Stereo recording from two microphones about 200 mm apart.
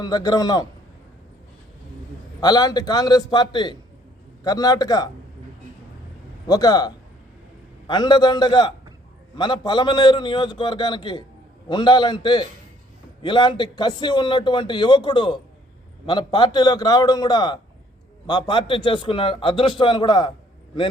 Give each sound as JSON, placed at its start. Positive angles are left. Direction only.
{"t": 0.0, "sound": "a man's voice", "side_deg": 20}
{"t": 2.4, "sound": "a man's voice", "side_deg": 20}
{"t": 6.5, "sound": "a man's voice", "side_deg": 20}